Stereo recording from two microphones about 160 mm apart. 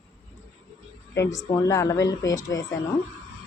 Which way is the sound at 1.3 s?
20° left (ahead or behind).